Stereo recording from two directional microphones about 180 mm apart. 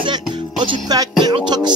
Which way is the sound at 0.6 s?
25° right (ahead or behind).